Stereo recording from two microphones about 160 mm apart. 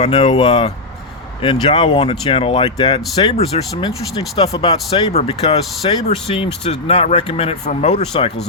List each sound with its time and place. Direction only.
0.0 s speech: 40° left (ahead or behind)
0.3 s speech: 30° left (ahead or behind)